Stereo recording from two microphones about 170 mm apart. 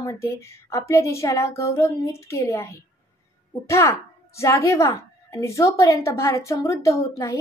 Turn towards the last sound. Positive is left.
turn(degrees=20)  # may be behind; listen again after turning